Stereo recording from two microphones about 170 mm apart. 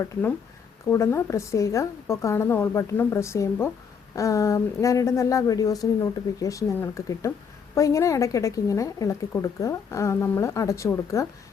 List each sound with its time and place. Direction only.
0.0 s a woman's voice: 10° left (ahead or behind)